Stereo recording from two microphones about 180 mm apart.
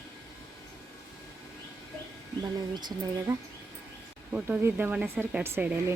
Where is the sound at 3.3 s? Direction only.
15° right (ahead or behind).